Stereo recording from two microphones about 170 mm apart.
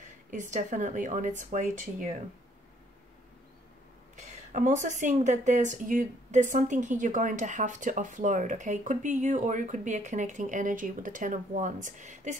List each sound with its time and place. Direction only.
0.0 s speech: 45° right (ahead or behind)
4.3 s speech: 45° right (ahead or behind)